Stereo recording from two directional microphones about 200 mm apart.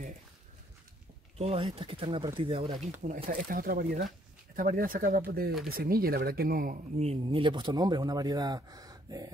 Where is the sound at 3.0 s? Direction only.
40° right (ahead or behind).